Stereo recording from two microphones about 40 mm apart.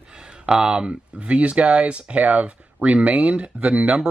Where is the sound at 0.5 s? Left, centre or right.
Right.